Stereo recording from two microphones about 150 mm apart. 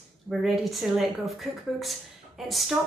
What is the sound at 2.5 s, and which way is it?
Speech, centre (ahead or behind).